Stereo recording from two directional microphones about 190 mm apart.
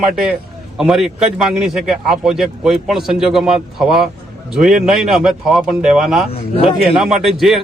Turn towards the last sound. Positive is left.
turn(degrees=0)  # may be behind; listen again after turning